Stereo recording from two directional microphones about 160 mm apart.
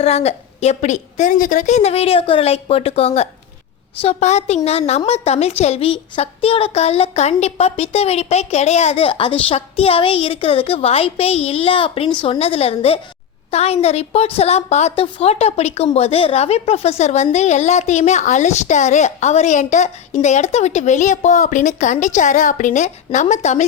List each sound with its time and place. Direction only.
0.0 s a woman's voice: 40° left (ahead or behind)